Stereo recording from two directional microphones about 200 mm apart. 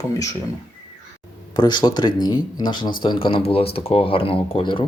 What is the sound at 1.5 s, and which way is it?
Speech, 20° left (ahead or behind).